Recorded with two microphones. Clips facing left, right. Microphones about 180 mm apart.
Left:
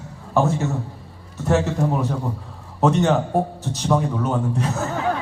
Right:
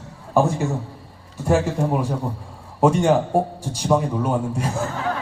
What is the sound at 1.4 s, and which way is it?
A man's voice, 10° right (ahead or behind).